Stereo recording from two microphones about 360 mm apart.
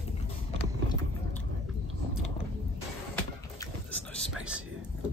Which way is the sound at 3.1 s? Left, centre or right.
Centre.